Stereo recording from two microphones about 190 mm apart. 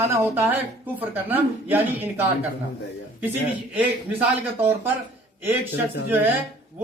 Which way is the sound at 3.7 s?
10° right (ahead or behind).